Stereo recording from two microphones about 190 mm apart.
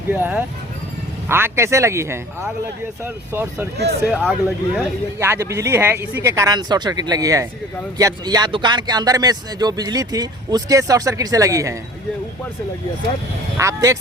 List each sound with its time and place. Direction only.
0.1 s speech: 10° right (ahead or behind)
4.1 s speech: centre (ahead or behind)
13.6 s speech: 15° right (ahead or behind)